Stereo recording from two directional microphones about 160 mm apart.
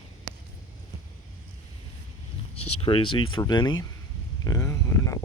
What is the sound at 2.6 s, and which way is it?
Speech, 35° left (ahead or behind).